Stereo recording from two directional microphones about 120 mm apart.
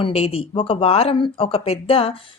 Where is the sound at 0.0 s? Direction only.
55° left (ahead or behind).